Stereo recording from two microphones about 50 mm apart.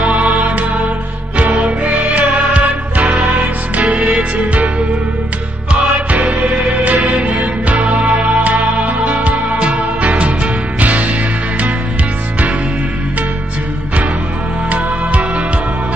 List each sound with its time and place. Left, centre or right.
0.0 s music: right
14.7 s music: right